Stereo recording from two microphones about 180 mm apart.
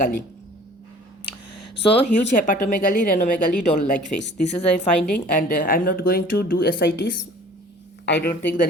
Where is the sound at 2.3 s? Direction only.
45° left (ahead or behind).